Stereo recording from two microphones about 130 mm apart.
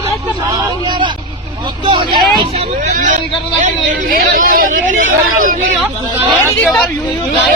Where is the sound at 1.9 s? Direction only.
35° right (ahead or behind).